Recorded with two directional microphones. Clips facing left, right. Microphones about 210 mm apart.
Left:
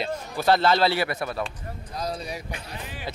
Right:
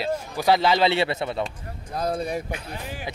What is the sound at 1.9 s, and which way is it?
Speech, 55° right (ahead or behind).